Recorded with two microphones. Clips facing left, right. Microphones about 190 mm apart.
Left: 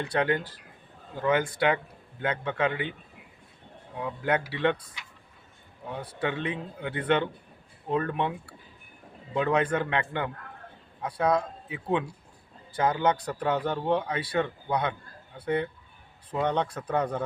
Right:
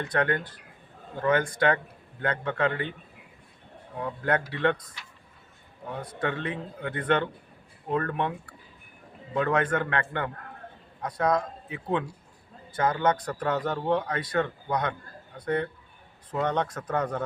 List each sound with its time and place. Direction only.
0.0 s speech: 10° left (ahead or behind)
4.0 s speech: 10° left (ahead or behind)
6.0 s speech: 10° left (ahead or behind)
9.3 s speech: 15° left (ahead or behind)